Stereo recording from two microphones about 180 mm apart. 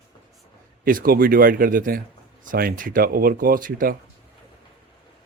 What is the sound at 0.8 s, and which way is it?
Speech, 50° right (ahead or behind).